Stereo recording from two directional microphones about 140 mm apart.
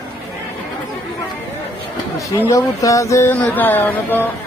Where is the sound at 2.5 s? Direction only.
25° left (ahead or behind).